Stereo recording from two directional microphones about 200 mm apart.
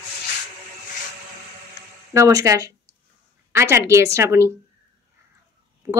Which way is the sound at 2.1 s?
15° right (ahead or behind).